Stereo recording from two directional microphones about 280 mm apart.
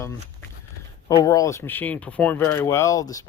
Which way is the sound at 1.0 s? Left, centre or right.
Centre.